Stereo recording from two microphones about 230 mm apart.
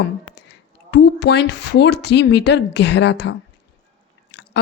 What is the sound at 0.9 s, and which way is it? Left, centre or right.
Speech, left.